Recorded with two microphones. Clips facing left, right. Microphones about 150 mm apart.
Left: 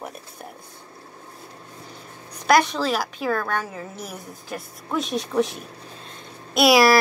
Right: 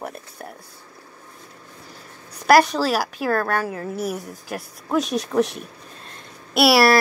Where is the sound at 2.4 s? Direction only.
5° right (ahead or behind).